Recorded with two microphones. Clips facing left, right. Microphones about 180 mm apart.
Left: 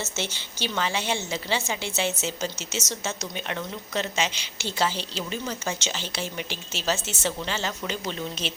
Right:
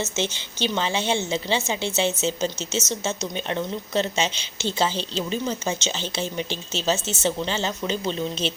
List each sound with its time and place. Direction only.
0.0 s a woman's voice: 20° right (ahead or behind)